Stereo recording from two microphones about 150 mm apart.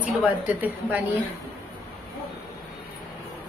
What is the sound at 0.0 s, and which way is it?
A woman's voice, 10° right (ahead or behind).